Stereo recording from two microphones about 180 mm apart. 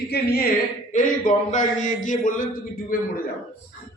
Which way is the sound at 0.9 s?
45° left (ahead or behind).